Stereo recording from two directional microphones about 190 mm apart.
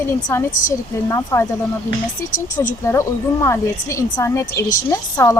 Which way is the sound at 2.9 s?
15° left (ahead or behind).